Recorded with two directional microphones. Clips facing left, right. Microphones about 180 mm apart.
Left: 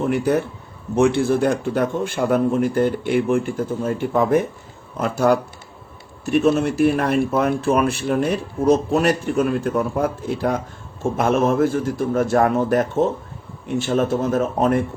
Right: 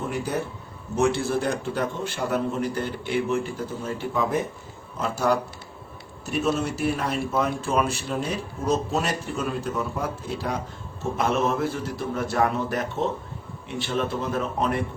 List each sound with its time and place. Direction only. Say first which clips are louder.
0.9 s speech: left 6 dB; 55° left (ahead or behind)
6.4 s speech: left 7 dB; 55° left (ahead or behind)